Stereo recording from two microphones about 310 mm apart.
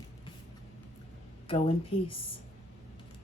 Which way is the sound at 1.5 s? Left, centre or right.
Centre.